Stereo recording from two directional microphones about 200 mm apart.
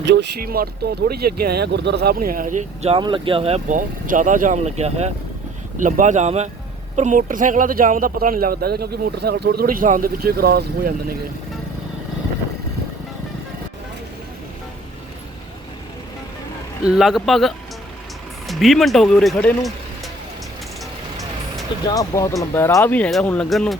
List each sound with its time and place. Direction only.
0.0 s speech: 60° right (ahead or behind)
16.8 s speech: 5° right (ahead or behind)
21.8 s speech: 15° left (ahead or behind); by 23.7 s centre (ahead or behind)